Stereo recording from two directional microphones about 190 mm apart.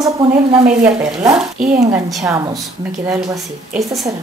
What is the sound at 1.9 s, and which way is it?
Speech, 15° right (ahead or behind).